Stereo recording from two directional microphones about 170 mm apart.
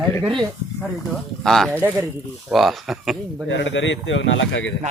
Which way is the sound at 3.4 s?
90° left.